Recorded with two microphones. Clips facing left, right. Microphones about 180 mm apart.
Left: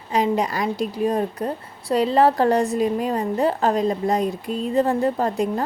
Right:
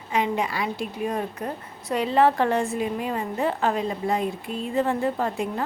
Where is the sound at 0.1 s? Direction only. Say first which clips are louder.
Left 4 dB; 35° left (ahead or behind).